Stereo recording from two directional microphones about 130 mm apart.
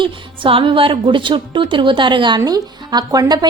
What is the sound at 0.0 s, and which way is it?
A woman's voice, 40° right (ahead or behind).